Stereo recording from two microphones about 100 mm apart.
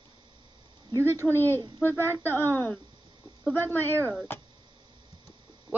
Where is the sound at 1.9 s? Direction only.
25° right (ahead or behind).